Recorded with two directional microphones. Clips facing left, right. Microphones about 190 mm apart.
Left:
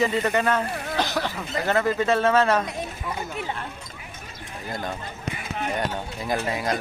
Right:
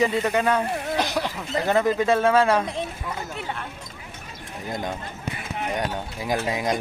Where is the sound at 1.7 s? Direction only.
15° right (ahead or behind).